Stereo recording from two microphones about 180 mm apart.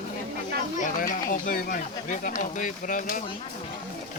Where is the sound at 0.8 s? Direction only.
50° left (ahead or behind).